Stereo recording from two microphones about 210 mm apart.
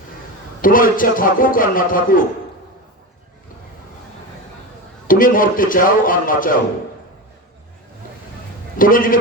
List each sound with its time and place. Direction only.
0.6 s a man's voice: 40° left (ahead or behind)
5.0 s a man's voice: 40° left (ahead or behind)
8.8 s a man's voice: 40° left (ahead or behind)